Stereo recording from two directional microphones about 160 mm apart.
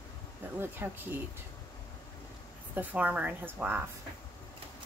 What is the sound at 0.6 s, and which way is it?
Speech, 15° right (ahead or behind).